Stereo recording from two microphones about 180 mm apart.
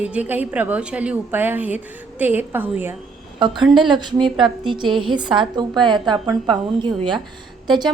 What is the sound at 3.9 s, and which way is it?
Speech, 25° right (ahead or behind).